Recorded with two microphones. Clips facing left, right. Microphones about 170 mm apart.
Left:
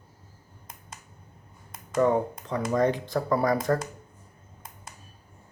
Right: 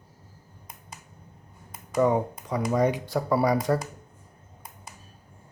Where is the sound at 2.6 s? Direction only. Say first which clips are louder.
Even; 10° right (ahead or behind).